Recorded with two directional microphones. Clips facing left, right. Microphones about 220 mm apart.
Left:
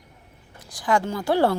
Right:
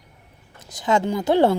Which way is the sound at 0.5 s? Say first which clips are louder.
Right 2 dB; 25° right (ahead or behind).